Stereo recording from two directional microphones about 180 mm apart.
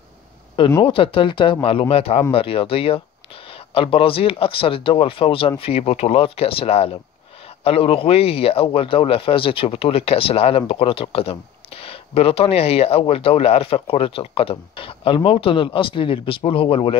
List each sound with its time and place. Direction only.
0.8 s speech: 30° left (ahead or behind)